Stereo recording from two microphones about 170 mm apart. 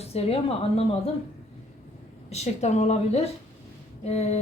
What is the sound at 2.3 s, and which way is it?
Speech, 40° left (ahead or behind).